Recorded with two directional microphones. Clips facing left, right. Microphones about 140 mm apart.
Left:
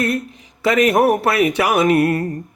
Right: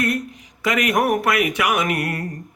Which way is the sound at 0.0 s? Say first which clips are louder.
Left 2 dB; 30° left (ahead or behind).